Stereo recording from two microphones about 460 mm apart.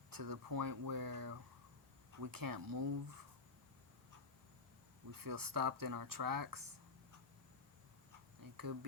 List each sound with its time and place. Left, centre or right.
0.1 s speech: right
5.2 s speech: right
8.4 s a sound: right